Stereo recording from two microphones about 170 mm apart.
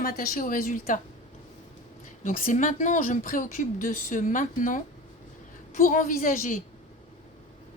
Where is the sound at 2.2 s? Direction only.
50° left (ahead or behind).